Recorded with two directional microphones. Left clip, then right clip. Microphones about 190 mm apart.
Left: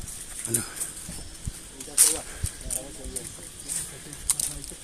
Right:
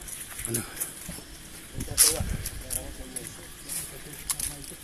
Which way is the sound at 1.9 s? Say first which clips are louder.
Even; 50° left (ahead or behind).